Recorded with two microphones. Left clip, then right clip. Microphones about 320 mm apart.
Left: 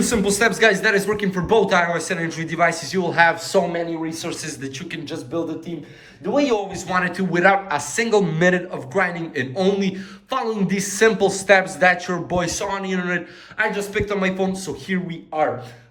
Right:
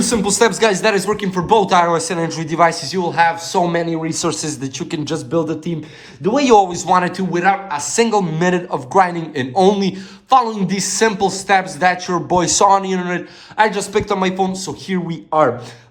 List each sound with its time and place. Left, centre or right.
0.0 s a man's voice: centre
3.7 s a man's voice: centre
6.7 s a man's voice: centre